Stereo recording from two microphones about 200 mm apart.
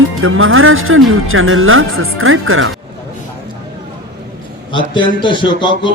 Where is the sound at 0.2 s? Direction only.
90° right.